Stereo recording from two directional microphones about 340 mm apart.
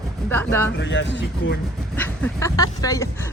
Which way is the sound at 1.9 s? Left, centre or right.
Centre.